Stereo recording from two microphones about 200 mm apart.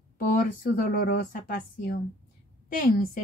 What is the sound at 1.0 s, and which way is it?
Speech, 50° left (ahead or behind).